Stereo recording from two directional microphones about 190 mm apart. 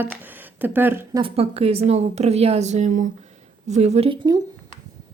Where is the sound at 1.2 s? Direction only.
30° right (ahead or behind).